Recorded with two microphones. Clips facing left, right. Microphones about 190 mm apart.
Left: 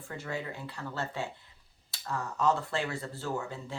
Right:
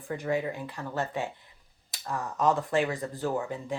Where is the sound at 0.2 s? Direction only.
15° right (ahead or behind).